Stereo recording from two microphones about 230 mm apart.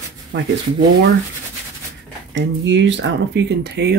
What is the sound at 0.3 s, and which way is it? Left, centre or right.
Speech, right.